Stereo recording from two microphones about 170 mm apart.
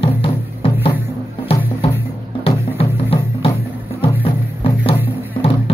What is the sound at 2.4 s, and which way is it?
Music, 35° left (ahead or behind).